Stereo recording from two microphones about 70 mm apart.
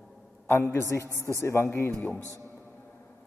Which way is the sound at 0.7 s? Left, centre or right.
Left.